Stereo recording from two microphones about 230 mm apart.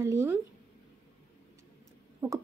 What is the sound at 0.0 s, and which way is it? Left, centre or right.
Speech, centre.